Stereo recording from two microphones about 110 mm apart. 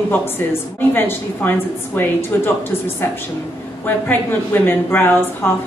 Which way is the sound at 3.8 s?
15° left (ahead or behind).